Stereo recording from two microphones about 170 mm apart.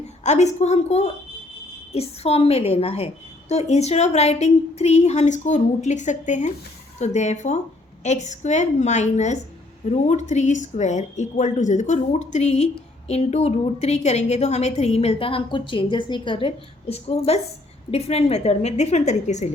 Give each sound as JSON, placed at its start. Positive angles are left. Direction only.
{"t": 0.2, "sound": "a woman's voice", "side_deg": 40}